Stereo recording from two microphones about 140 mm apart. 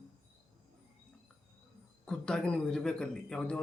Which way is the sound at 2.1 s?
5° left (ahead or behind).